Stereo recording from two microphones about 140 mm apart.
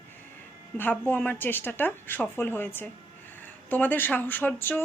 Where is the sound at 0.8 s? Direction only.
15° left (ahead or behind).